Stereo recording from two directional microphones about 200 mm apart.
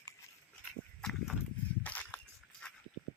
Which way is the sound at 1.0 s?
Centre (ahead or behind).